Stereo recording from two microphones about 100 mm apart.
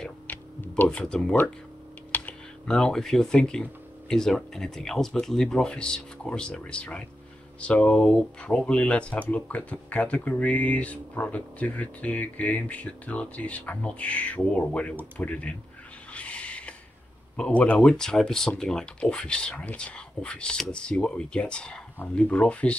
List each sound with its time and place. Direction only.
0.3 s a sound: 20° left (ahead or behind)
0.9 s speech: 5° left (ahead or behind)
2.1 s computer keyboard: 20° left (ahead or behind)
2.7 s speech: 5° left (ahead or behind)
16.1 s a sound: 15° left (ahead or behind)
17.4 s speech: 15° left (ahead or behind)